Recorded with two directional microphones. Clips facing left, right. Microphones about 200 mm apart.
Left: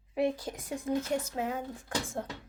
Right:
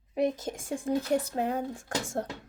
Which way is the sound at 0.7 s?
30° right (ahead or behind).